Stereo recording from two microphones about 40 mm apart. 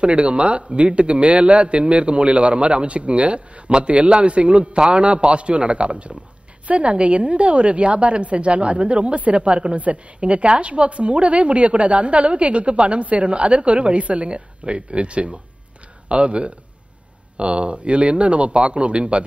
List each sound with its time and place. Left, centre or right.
0.0 s a man's voice: right